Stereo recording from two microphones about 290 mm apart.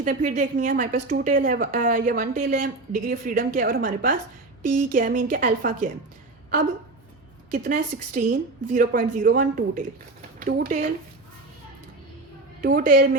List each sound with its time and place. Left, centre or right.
0.0 s a woman's voice: right
7.5 s a woman's voice: right
12.6 s a woman's voice: right